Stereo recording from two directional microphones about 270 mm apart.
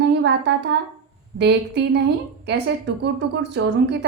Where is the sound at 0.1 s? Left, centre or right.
Right.